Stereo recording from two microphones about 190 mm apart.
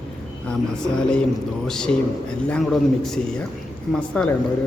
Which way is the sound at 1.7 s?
5° left (ahead or behind).